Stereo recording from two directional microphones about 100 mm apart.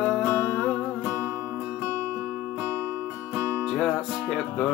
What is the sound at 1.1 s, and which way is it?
Music, 20° right (ahead or behind).